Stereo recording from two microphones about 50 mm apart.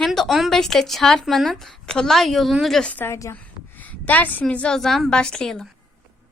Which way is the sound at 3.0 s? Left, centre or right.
Left.